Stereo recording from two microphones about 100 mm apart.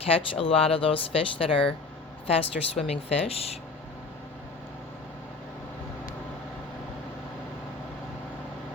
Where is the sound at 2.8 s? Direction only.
90° left.